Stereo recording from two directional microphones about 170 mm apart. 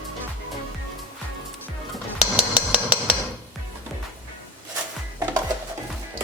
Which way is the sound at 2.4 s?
5° right (ahead or behind).